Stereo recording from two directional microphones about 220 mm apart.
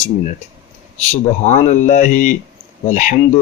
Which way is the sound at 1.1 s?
30° left (ahead or behind).